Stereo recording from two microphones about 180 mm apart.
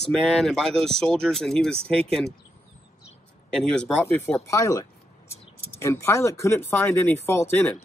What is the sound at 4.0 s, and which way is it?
Speech, 10° left (ahead or behind).